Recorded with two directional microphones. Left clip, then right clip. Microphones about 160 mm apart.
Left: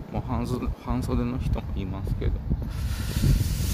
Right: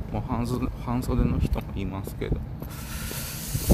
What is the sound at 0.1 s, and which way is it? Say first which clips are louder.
Speech: right 1 dB; 10° left (ahead or behind).